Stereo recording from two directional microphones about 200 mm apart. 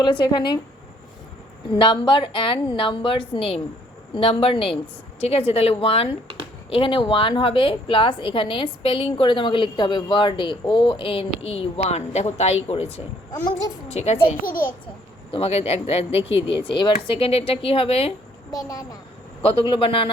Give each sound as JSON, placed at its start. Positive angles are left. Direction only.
{"t": 0.0, "sound": "a woman's voice", "side_deg": 20}
{"t": 1.7, "sound": "a woman's voice", "side_deg": 25}
{"t": 18.5, "sound": "a woman's voice", "side_deg": 15}
{"t": 19.4, "sound": "a woman's voice", "side_deg": 25}